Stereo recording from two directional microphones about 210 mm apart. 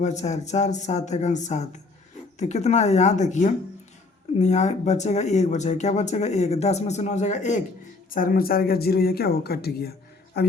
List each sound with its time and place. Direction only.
0.0 s speech: 35° left (ahead or behind); by 10.5 s 50° left (ahead or behind)